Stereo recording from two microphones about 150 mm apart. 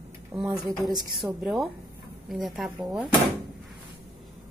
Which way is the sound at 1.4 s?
Centre (ahead or behind).